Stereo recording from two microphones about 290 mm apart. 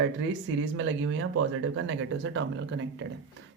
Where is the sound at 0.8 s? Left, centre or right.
Right.